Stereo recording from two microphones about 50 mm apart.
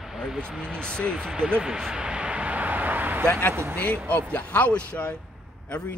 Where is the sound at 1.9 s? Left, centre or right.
Centre; by 3.2 s right.